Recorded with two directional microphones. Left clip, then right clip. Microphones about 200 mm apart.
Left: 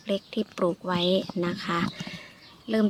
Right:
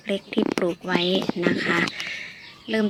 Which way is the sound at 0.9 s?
10° left (ahead or behind).